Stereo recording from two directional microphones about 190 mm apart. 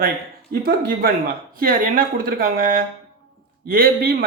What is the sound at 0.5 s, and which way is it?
Speech, 55° right (ahead or behind).